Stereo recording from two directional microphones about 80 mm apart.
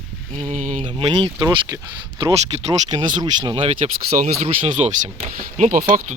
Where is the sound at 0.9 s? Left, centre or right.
Right.